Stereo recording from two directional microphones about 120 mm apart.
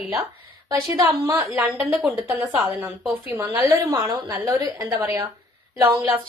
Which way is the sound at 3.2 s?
20° right (ahead or behind).